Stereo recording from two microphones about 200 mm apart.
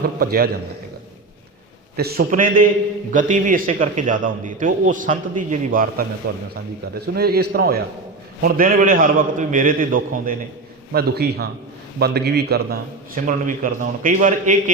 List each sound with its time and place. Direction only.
0.0 s a man's voice: 50° right (ahead or behind)
2.0 s a man's voice: 50° right (ahead or behind)